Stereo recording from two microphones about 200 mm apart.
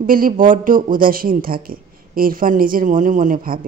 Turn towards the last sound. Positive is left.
turn(degrees=-45)  # may be behind; listen again after turning